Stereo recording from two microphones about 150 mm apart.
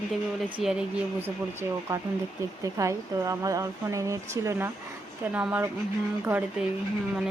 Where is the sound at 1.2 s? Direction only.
15° right (ahead or behind).